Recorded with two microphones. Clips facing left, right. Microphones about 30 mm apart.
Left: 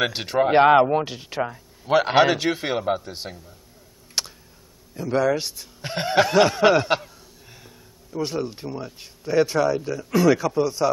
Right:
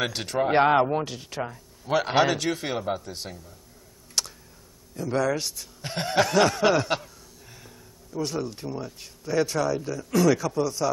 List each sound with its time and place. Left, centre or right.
0.0 s speech: centre
4.2 s a sound: centre
4.9 s speech: centre